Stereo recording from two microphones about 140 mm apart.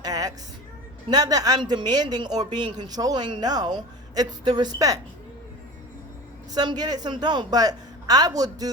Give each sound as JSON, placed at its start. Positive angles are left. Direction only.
{"t": 0.0, "sound": "music", "side_deg": -25}
{"t": 1.1, "sound": "speech", "side_deg": -25}
{"t": 6.5, "sound": "speech", "side_deg": -30}